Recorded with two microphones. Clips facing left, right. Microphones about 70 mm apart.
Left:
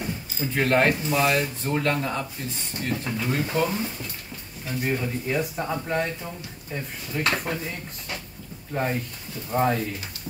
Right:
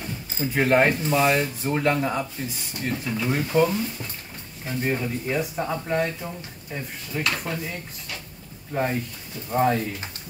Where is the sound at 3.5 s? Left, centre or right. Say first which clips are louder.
Right 6 dB; right.